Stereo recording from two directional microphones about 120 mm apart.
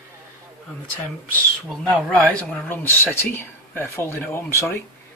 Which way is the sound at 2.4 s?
10° left (ahead or behind).